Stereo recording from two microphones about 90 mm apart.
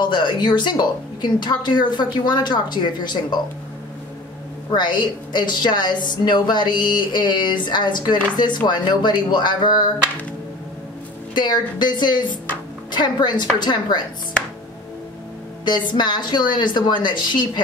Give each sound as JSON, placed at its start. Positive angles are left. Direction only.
{"t": 0.0, "sound": "speech", "side_deg": 60}
{"t": 4.6, "sound": "speech", "side_deg": 55}
{"t": 11.3, "sound": "a woman's voice", "side_deg": 55}
{"t": 15.6, "sound": "speech", "side_deg": 55}